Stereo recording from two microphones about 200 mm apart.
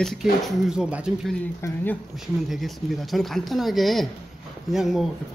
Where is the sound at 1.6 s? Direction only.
15° left (ahead or behind).